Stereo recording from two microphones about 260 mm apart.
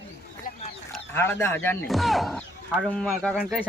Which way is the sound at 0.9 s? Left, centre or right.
Centre.